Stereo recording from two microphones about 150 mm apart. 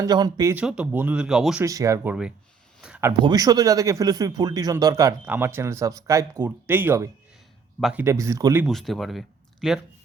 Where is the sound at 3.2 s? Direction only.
25° right (ahead or behind).